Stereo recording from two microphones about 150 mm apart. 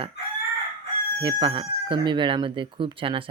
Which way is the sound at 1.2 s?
35° right (ahead or behind).